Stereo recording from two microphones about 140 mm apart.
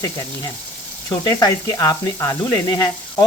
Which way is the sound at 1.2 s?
25° left (ahead or behind).